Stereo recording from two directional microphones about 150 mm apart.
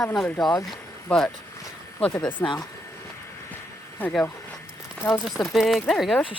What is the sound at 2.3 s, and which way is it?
Speech, 30° left (ahead or behind).